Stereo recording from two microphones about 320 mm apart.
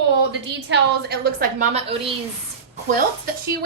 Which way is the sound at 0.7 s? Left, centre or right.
Right.